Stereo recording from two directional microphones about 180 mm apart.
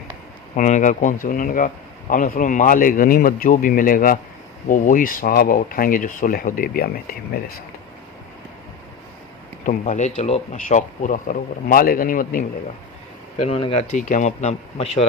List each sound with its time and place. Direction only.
0.5 s a man's voice: 45° left (ahead or behind)
9.6 s a man's voice: 40° left (ahead or behind)
13.5 s speech: 35° left (ahead or behind)
13.9 s speech: 45° left (ahead or behind)